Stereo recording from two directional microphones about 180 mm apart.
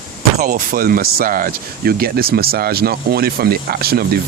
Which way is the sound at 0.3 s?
50° right (ahead or behind).